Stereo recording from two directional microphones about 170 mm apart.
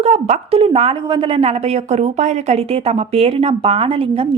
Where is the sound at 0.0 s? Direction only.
35° right (ahead or behind).